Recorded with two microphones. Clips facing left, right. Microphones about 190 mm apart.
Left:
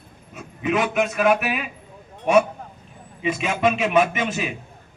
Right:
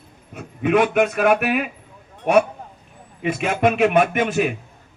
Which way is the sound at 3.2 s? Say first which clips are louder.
Right 2 dB; 55° right (ahead or behind).